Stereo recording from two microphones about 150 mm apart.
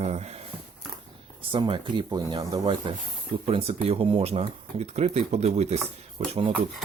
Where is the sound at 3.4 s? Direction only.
40° right (ahead or behind).